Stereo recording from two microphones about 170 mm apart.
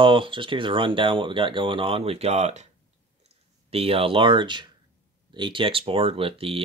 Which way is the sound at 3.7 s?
35° right (ahead or behind).